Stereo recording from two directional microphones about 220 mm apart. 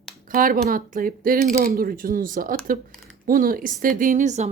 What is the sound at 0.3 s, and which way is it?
Speech, 40° right (ahead or behind).